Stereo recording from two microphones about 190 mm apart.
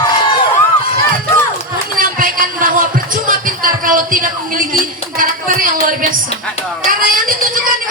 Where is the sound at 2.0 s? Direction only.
45° right (ahead or behind).